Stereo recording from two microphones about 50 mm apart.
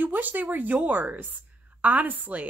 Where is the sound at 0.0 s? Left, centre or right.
Right.